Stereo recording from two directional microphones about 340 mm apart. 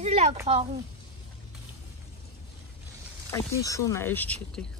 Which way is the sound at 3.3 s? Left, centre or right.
Centre.